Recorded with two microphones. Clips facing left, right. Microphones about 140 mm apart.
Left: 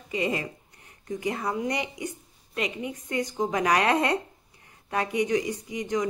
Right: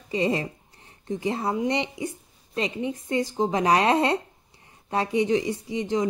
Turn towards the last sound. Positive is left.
turn(degrees=-30)  # may be behind; listen again after turning